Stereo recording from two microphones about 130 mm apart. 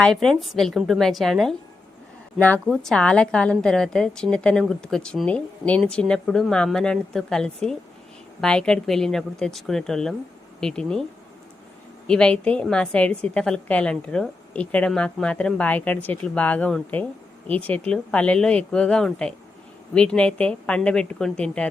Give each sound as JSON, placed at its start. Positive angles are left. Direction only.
{"t": 0.0, "sound": "a woman's voice", "side_deg": 5}
{"t": 2.6, "sound": "a woman's voice", "side_deg": 0}
{"t": 12.0, "sound": "a woman's voice", "side_deg": 5}